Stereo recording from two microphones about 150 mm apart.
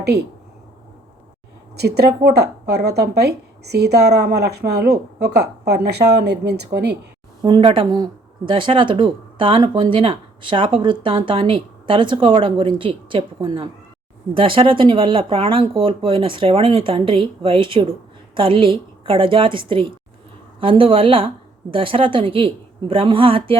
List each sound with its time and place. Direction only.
0.0 s speech: 90° right
1.7 s speech: 90° right
7.4 s speech: 35° right (ahead or behind)